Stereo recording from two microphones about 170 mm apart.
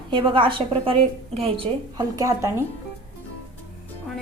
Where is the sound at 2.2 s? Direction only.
15° right (ahead or behind).